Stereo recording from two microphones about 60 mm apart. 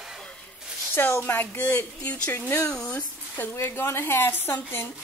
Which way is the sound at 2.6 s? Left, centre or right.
Centre.